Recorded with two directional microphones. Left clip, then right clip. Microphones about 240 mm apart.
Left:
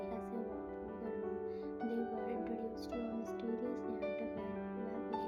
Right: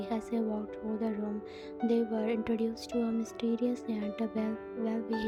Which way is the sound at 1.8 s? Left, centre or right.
Right.